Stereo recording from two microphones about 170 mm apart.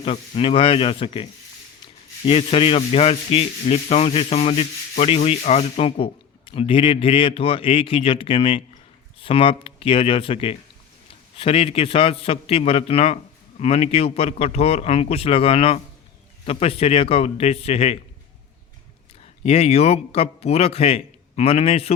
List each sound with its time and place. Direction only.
0.0 s sanding: 35° left (ahead or behind)
19.4 s sanding: 35° left (ahead or behind)